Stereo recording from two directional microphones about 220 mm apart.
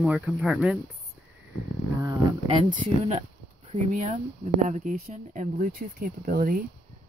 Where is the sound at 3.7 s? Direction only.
30° right (ahead or behind).